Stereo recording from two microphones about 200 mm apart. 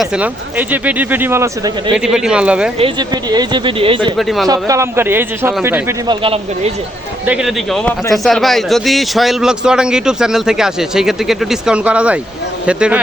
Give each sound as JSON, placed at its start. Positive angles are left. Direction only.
{"t": 0.0, "sound": "a man's voice", "side_deg": -10}
{"t": 2.7, "sound": "speech", "side_deg": -25}
{"t": 4.2, "sound": "a man's voice", "side_deg": 0}
{"t": 4.4, "sound": "speech", "side_deg": -15}
{"t": 6.1, "sound": "speech", "side_deg": -25}
{"t": 7.3, "sound": "a man's voice", "side_deg": 0}